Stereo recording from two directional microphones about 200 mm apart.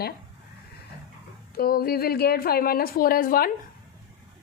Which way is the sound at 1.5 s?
50° left (ahead or behind).